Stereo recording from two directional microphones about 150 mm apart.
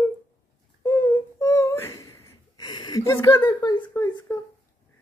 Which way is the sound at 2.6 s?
30° left (ahead or behind).